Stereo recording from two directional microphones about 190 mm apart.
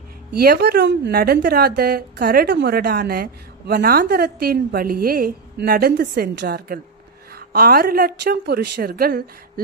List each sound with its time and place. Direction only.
0.3 s a woman's voice: 55° right (ahead or behind)